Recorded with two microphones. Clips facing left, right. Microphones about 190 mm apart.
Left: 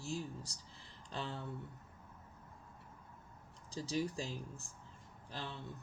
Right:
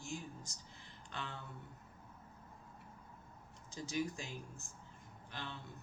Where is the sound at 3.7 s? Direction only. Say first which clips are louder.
Left 2 dB; 35° left (ahead or behind).